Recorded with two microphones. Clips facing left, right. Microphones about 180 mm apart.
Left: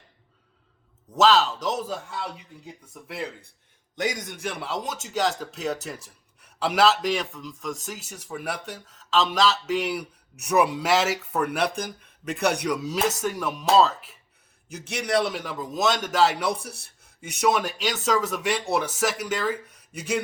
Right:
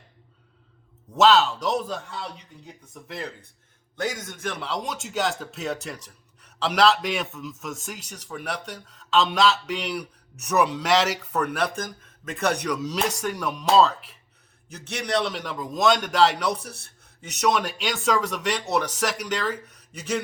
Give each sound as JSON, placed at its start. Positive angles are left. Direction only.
{"t": 1.1, "sound": "speech", "side_deg": 0}
{"t": 3.9, "sound": "speech", "side_deg": 15}